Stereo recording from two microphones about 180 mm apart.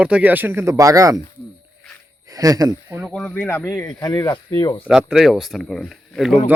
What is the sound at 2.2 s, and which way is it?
Speech, 20° right (ahead or behind).